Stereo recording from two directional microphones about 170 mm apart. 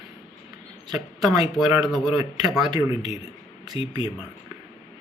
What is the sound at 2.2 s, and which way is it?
Speech, 20° right (ahead or behind).